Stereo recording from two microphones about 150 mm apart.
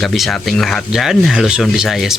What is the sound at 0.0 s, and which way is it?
Speech, centre (ahead or behind).